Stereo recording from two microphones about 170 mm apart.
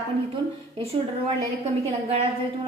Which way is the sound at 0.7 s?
35° right (ahead or behind).